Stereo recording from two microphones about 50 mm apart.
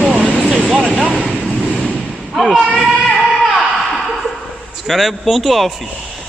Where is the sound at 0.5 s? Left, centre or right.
Centre.